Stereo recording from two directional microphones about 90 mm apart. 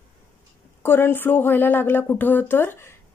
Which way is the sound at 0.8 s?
25° left (ahead or behind).